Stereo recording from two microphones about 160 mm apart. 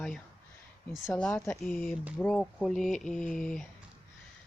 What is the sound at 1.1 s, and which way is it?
Speech, 10° left (ahead or behind).